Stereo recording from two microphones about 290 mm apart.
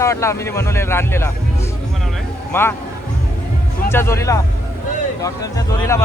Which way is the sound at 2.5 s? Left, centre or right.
Centre.